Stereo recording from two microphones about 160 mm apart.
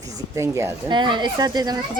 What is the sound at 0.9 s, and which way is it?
Speech, 30° right (ahead or behind).